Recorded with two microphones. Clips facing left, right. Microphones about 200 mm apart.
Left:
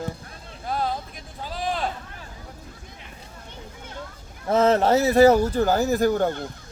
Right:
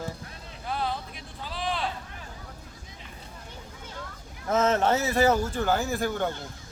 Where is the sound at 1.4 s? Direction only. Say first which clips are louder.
Left 4 dB; 45° left (ahead or behind).